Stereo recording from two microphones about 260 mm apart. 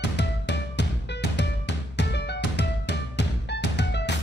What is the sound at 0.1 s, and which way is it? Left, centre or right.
Music, left.